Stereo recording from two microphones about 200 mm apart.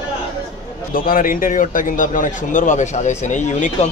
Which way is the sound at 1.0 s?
45° left (ahead or behind).